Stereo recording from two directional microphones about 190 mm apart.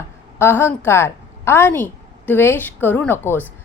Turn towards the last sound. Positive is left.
turn(degrees=10)  # may be behind; listen again after turning